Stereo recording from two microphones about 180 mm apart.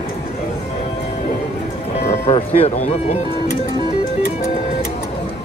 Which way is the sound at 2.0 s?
40° left (ahead or behind).